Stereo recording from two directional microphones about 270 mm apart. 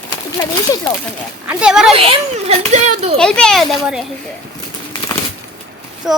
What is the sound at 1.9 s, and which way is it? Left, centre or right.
A child's voice, centre.